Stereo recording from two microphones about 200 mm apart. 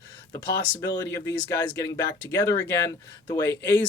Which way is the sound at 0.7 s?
15° left (ahead or behind).